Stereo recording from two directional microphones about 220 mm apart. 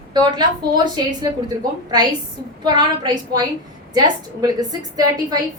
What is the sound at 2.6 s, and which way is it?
A woman's voice, 20° right (ahead or behind).